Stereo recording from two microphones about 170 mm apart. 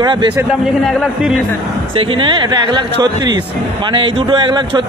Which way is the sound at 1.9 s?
30° right (ahead or behind).